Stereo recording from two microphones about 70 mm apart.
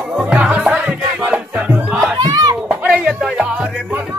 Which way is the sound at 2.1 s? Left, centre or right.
Right.